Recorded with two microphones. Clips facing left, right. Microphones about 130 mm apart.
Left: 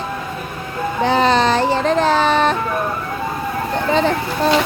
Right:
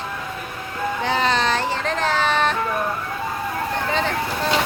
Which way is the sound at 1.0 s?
35° left (ahead or behind).